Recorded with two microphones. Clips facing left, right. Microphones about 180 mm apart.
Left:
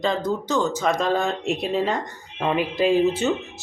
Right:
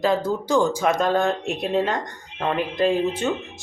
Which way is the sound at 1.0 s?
Centre (ahead or behind).